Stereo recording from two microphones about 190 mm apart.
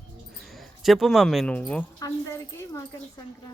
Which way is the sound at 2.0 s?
20° left (ahead or behind).